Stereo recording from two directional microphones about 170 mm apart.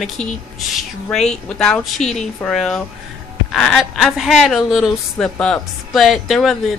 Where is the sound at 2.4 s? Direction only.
5° left (ahead or behind).